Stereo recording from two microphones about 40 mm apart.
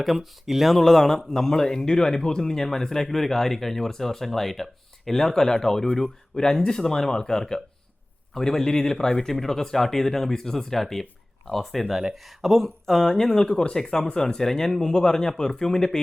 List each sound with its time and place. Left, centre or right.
0.4 s speech: centre
0.8 s speech: centre
11.9 s speech: centre
12.1 s speech: centre